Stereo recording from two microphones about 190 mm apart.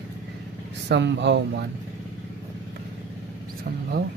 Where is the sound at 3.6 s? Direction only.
55° right (ahead or behind).